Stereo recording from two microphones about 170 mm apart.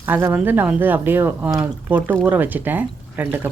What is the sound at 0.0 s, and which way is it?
A woman's voice, 15° right (ahead or behind).